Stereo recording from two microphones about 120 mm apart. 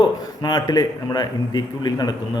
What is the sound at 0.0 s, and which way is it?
A man's voice, 35° left (ahead or behind).